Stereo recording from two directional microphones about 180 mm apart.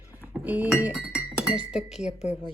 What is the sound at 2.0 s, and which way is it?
Speech, 35° left (ahead or behind).